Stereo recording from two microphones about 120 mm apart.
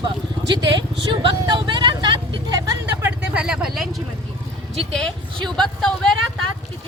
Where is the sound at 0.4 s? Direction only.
40° right (ahead or behind).